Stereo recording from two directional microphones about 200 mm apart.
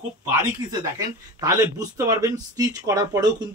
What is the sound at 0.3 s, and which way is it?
Speech, 15° right (ahead or behind).